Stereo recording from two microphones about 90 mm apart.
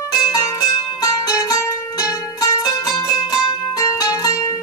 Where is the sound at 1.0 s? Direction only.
45° left (ahead or behind).